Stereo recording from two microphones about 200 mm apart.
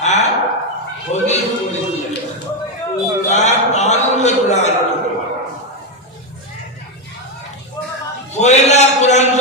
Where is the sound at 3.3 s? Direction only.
35° left (ahead or behind).